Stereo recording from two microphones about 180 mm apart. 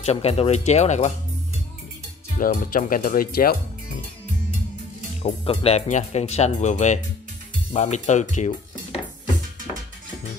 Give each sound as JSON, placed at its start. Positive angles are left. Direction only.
{"t": 0.0, "sound": "speech", "side_deg": 35}
{"t": 2.3, "sound": "speech", "side_deg": 50}
{"t": 5.2, "sound": "speech", "side_deg": 35}